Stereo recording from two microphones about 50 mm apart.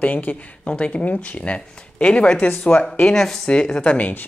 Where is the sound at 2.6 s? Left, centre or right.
Left.